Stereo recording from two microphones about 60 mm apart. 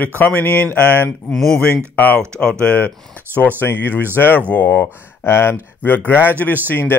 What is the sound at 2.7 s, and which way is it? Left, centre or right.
Speech, left.